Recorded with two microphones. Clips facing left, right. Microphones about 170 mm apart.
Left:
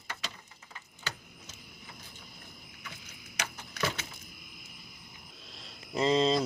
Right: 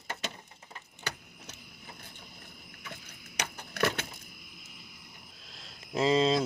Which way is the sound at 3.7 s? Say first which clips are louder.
Right 5 dB; 60° right (ahead or behind).